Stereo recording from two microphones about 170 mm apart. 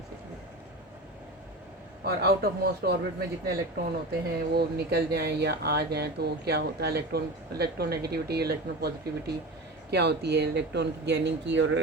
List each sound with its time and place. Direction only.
2.0 s speech: 65° right (ahead or behind)
9.9 s speech: 80° right